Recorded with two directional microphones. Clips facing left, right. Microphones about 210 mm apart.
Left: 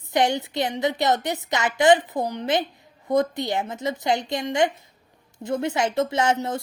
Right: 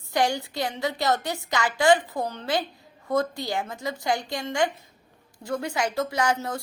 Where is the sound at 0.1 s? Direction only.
20° left (ahead or behind).